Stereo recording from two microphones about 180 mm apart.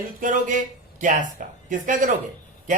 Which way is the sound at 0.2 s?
45° right (ahead or behind).